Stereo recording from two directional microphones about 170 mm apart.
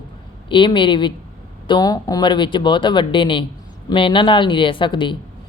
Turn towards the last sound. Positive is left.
turn(degrees=30)  # may be behind; listen again after turning